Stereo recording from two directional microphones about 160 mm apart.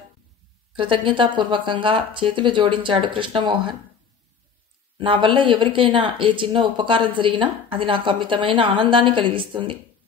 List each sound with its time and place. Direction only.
0.7 s speech: 30° right (ahead or behind)
4.9 s speech: 30° right (ahead or behind)